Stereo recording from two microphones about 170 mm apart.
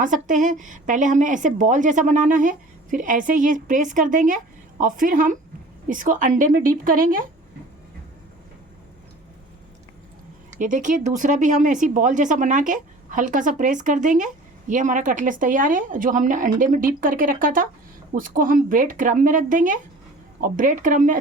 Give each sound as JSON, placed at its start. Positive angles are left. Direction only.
{"t": 0.0, "sound": "a woman's voice", "side_deg": -50}
{"t": 10.6, "sound": "a woman's voice", "side_deg": -50}